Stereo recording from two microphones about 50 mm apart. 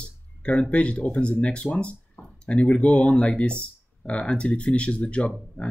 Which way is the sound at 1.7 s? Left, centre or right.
Left.